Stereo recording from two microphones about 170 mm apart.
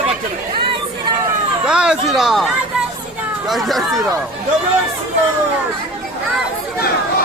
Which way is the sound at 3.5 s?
Centre (ahead or behind).